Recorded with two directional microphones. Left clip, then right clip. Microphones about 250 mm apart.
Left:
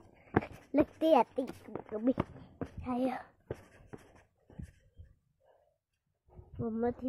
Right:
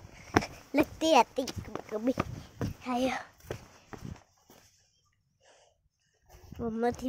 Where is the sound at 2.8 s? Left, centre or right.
Centre.